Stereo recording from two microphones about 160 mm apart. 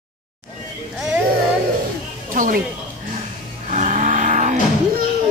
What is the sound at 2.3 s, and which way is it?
Speech, 55° right (ahead or behind).